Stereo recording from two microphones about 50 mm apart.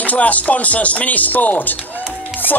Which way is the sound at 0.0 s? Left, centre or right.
Left.